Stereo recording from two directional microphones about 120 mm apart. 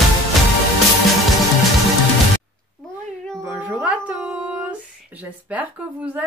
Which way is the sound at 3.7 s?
10° right (ahead or behind).